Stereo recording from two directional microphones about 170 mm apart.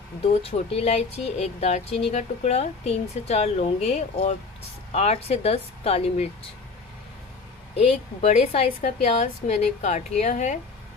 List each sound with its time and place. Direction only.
0.3 s speech: 35° left (ahead or behind)
7.7 s speech: 40° left (ahead or behind)